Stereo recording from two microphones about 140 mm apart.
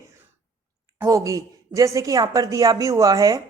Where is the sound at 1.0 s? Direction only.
20° right (ahead or behind).